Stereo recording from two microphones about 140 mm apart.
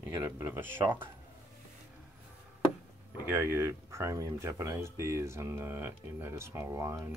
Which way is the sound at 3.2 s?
15° right (ahead or behind).